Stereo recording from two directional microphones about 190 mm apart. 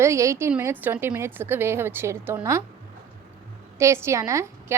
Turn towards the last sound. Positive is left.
turn(degrees=-15)  # may be behind; listen again after turning